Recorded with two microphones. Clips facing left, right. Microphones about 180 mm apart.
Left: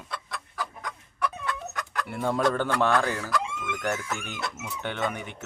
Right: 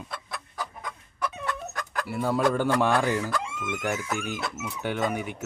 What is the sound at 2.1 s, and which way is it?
Speech, 5° right (ahead or behind).